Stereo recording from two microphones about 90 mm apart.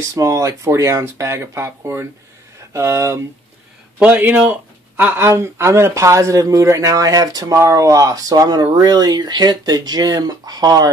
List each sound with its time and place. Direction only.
0.0 s speech: 35° right (ahead or behind)
4.0 s speech: 20° right (ahead or behind); by 10.9 s 45° right (ahead or behind)